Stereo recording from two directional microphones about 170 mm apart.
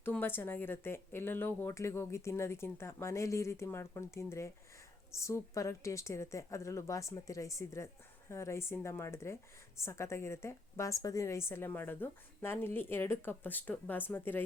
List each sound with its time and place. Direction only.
0.0 s a woman's voice: 10° left (ahead or behind)